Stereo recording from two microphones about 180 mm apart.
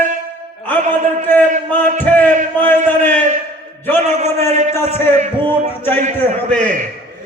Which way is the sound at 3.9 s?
40° right (ahead or behind).